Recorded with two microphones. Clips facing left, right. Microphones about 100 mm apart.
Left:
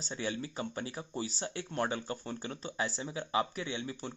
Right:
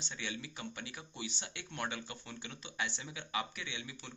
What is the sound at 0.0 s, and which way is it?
Speech, 40° left (ahead or behind).